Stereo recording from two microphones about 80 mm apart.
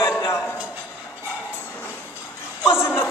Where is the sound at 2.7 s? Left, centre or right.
Left.